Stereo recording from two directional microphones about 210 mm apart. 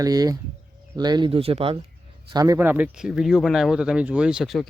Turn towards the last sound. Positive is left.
turn(degrees=0)  # may be behind; listen again after turning